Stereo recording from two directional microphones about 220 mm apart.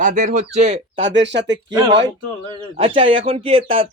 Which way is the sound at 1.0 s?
55° right (ahead or behind).